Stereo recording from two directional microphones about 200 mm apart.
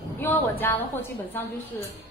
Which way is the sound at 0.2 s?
10° left (ahead or behind).